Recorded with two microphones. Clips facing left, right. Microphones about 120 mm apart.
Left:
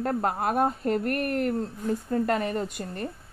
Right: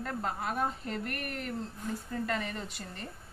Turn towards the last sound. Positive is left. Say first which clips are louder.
# left 10 dB
turn(degrees=50)  # may be behind; listen again after turning